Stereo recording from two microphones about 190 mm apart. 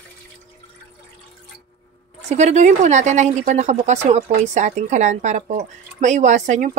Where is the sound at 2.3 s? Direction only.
35° right (ahead or behind).